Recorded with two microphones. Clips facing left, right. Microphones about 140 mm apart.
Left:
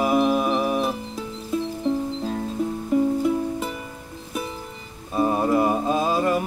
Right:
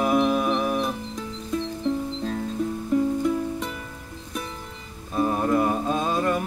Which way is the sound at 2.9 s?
10° left (ahead or behind).